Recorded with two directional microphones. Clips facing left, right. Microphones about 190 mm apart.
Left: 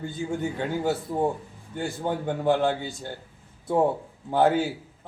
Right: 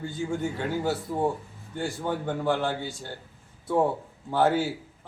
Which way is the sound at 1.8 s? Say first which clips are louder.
Left 1 dB; 20° left (ahead or behind).